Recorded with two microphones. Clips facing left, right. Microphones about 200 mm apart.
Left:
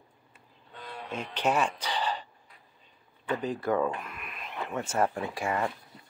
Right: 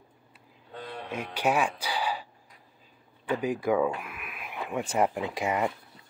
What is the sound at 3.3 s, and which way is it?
Speech, 10° right (ahead or behind).